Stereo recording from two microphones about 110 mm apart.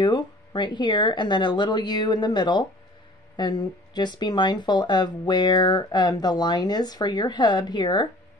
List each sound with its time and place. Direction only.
0.0 s speech: 45° left (ahead or behind)